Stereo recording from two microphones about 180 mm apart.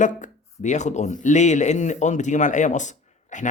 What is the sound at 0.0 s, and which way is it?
A man's voice, 45° left (ahead or behind).